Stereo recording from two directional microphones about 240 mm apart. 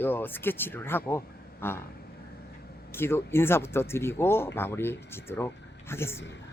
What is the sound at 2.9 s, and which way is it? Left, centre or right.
Speech, centre.